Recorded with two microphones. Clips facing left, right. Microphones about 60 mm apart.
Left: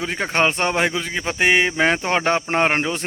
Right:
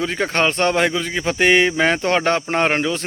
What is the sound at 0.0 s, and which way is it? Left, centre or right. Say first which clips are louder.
Speech: right 1 dB; centre.